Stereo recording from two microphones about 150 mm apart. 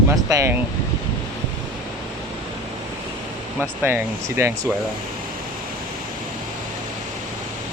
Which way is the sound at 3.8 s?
15° right (ahead or behind).